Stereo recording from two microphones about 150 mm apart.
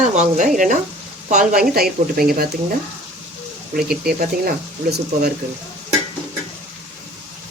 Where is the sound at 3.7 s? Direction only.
90° right.